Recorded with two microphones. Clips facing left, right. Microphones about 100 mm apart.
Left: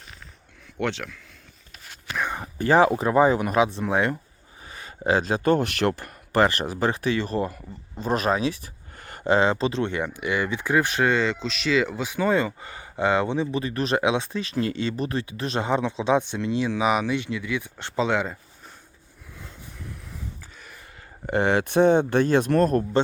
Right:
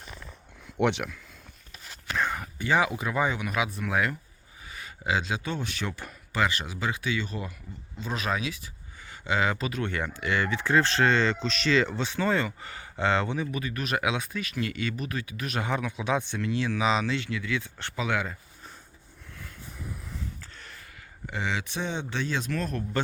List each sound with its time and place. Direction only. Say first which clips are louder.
0.8 s speech: right 2 dB; 15° right (ahead or behind)
2.1 s whispering: even; 15° left (ahead or behind)
2.6 s speech: left 8 dB; 40° left (ahead or behind)
3.7 s speech: left 4 dB; 25° left (ahead or behind)
9.0 s a sound: left 11 dB; 55° left (ahead or behind)
9.3 s speech: left 7 dB; 30° left (ahead or behind)
19.8 s a sound: right 1 dB; 5° right (ahead or behind)
21.2 s speech: left 10 dB; 55° left (ahead or behind)